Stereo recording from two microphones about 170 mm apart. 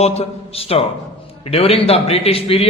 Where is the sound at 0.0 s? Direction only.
40° left (ahead or behind).